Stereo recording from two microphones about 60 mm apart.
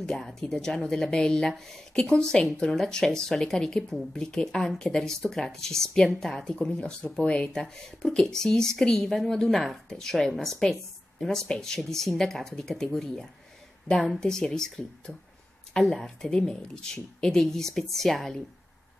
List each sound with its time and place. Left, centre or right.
0.0 s a woman's voice: centre
6.6 s a woman's voice: centre